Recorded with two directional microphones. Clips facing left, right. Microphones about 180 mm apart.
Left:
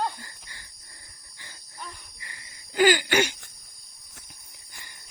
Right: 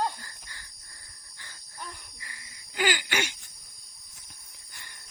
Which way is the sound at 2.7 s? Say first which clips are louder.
Left 8 dB; 40° left (ahead or behind).